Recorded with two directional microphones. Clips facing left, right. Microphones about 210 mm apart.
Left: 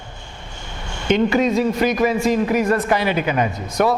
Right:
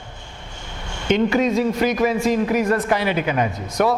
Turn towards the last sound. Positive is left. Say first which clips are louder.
# left 1 dB
turn(degrees=10)  # may be behind; listen again after turning